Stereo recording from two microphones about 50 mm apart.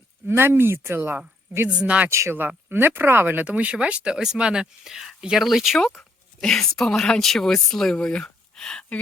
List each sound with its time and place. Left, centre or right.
0.3 s speech: right
1.8 s speech: right
2.0 s speech: right
2.6 s speech: right
3.3 s speech: right; by 5.8 s centre
6.0 s speech: centre
8.0 s a sound: centre